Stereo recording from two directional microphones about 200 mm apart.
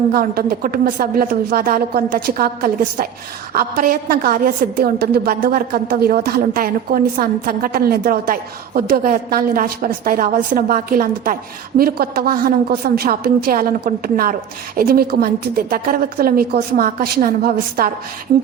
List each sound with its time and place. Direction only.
0.1 s a woman's voice: 45° right (ahead or behind)